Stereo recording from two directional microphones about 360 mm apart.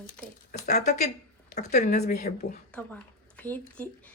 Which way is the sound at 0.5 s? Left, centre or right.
Left.